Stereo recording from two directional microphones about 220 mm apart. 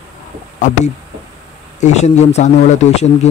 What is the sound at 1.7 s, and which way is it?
Speech, 30° left (ahead or behind).